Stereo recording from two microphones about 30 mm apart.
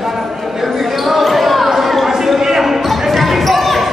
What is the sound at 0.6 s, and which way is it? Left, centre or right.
Basketball bounce, centre.